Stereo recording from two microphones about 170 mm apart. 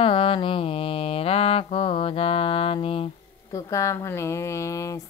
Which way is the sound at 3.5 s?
20° left (ahead or behind).